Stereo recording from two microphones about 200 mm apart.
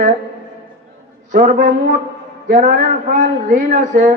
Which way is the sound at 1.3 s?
40° right (ahead or behind).